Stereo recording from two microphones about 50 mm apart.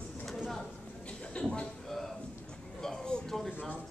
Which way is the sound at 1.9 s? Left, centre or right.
Centre.